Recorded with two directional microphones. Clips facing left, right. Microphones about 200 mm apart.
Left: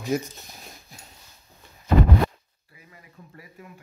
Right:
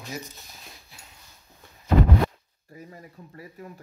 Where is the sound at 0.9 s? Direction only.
45° left (ahead or behind).